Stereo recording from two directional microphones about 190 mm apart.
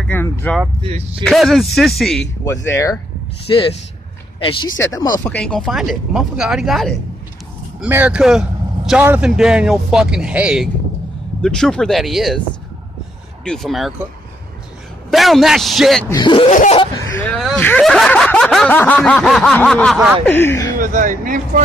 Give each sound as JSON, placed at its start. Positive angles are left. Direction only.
{"t": 0.1, "sound": "a sound", "side_deg": 10}
{"t": 1.2, "sound": "speech", "side_deg": 0}
{"t": 2.4, "sound": "speech", "side_deg": 15}
{"t": 4.4, "sound": "speech", "side_deg": 25}
{"t": 4.7, "sound": "speech", "side_deg": 15}
{"t": 5.2, "sound": "speech", "side_deg": 5}
{"t": 13.4, "sound": "speech", "side_deg": 5}
{"t": 15.0, "sound": "speech", "side_deg": 0}
{"t": 16.1, "sound": "speech", "side_deg": 25}
{"t": 17.2, "sound": "speech", "side_deg": 0}
{"t": 20.2, "sound": "speech", "side_deg": 10}
{"t": 20.8, "sound": "speech", "side_deg": -45}